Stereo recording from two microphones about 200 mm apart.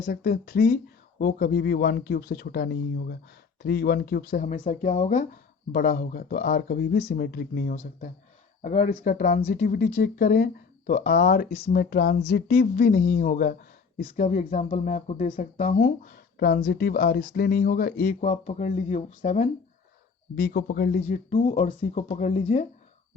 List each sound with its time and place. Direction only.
0.0 s speech: 45° left (ahead or behind)
5.3 s speech: 45° left (ahead or behind)
8.6 s speech: 35° left (ahead or behind)
18.2 s speech: 35° left (ahead or behind)
20.3 s speech: 50° left (ahead or behind)
21.0 s speech: 35° left (ahead or behind)